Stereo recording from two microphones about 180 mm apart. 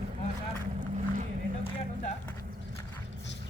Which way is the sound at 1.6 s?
40° left (ahead or behind).